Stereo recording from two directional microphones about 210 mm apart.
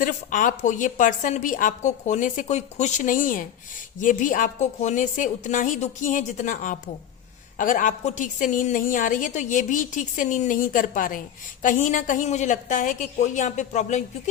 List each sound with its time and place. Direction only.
0.0 s a woman's voice: 40° left (ahead or behind)